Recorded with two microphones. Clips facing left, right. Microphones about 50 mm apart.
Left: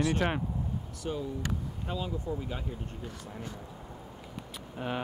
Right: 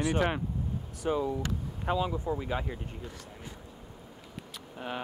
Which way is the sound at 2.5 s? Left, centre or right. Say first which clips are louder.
Right 5 dB; right.